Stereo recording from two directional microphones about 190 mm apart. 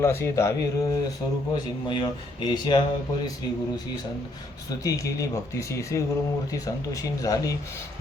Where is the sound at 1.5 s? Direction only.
25° left (ahead or behind).